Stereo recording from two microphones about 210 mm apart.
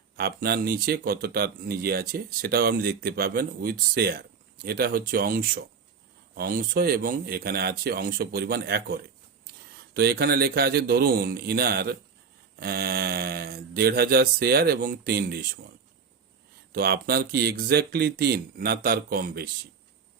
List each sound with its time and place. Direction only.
0.2 s speech: 50° right (ahead or behind)
16.7 s speech: 45° right (ahead or behind)